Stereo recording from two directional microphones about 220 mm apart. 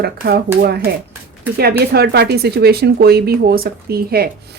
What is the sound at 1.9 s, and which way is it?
Speech, 45° right (ahead or behind).